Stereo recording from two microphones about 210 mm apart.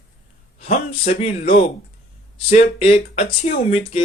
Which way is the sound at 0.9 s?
30° left (ahead or behind).